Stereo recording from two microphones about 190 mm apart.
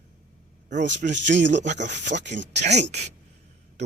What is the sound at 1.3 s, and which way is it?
Speech, 70° right (ahead or behind).